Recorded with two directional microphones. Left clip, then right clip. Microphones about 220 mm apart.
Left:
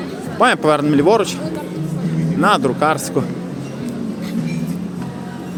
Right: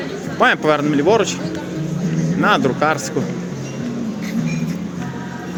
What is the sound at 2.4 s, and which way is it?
Speech, 15° left (ahead or behind).